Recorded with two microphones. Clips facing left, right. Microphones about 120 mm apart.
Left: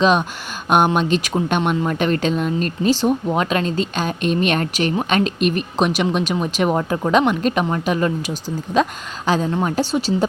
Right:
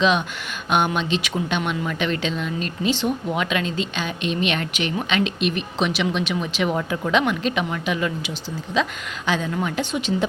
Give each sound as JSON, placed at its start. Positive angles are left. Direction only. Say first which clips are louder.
{"t": 0.0, "sound": "speech", "louder": "left 4 dB", "side_deg": 40}